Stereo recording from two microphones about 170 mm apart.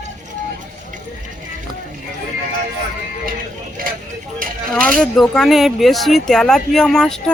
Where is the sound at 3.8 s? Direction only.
55° right (ahead or behind).